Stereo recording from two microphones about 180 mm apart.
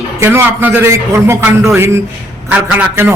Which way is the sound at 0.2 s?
15° right (ahead or behind).